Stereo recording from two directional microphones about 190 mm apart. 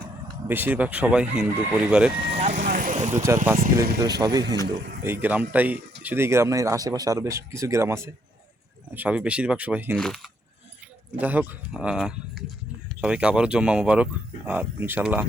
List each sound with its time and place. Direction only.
0.4 s speech: 10° right (ahead or behind)
2.3 s vehicle: 35° right (ahead or behind)
3.2 s speech: 15° right (ahead or behind)
11.2 s speech: 10° right (ahead or behind)